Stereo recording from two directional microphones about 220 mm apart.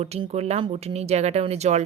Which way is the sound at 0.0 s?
30° right (ahead or behind).